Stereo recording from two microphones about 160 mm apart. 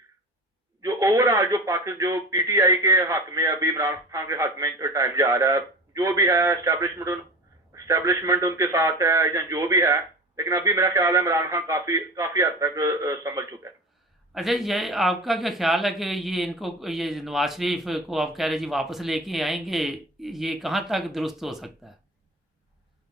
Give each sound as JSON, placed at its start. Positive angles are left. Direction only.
{"t": 0.8, "sound": "speech", "side_deg": -20}
{"t": 14.3, "sound": "speech", "side_deg": 0}